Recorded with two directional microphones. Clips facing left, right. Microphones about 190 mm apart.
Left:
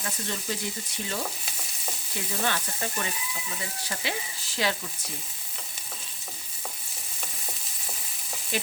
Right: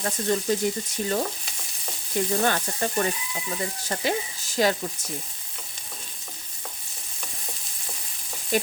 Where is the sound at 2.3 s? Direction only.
45° right (ahead or behind).